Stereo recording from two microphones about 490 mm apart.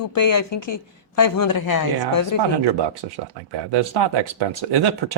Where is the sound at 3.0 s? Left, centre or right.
Right.